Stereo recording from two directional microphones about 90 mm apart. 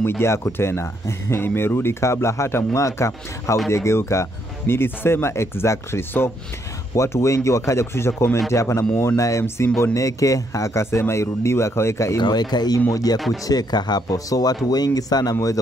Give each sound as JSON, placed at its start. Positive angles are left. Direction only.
{"t": 0.0, "sound": "speech", "side_deg": 25}
{"t": 12.2, "sound": "speech", "side_deg": 50}